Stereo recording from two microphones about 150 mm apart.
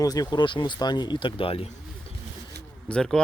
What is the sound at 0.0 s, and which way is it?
Speech, 25° left (ahead or behind).